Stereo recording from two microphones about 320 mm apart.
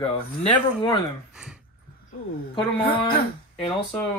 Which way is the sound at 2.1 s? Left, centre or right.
Centre.